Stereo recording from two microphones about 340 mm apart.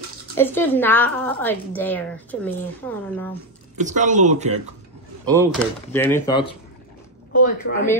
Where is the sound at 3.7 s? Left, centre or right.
Right.